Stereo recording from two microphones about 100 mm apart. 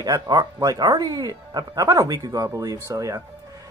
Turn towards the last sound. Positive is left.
turn(degrees=-35)  # may be behind; listen again after turning